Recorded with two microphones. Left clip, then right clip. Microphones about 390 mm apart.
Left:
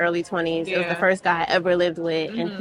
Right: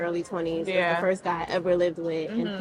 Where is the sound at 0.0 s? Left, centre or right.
Left.